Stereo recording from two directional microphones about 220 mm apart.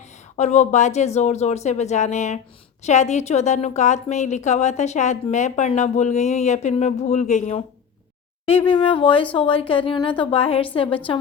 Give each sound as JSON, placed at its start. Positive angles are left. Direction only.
{"t": 0.3, "sound": "a woman's voice", "side_deg": 30}
{"t": 8.6, "sound": "speech", "side_deg": 25}